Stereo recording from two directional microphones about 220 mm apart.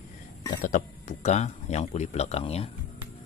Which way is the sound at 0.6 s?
35° left (ahead or behind).